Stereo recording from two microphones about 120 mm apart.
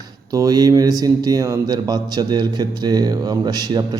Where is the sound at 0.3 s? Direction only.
30° right (ahead or behind).